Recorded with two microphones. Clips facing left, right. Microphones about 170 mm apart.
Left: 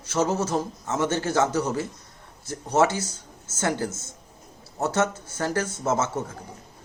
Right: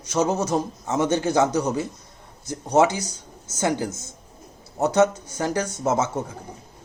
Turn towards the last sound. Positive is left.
turn(degrees=-15)  # may be behind; listen again after turning